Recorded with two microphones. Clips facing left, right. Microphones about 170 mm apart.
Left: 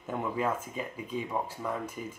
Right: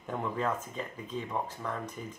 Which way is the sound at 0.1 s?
5° left (ahead or behind).